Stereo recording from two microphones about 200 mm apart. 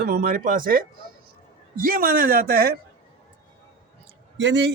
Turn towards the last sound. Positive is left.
turn(degrees=-65)  # may be behind; listen again after turning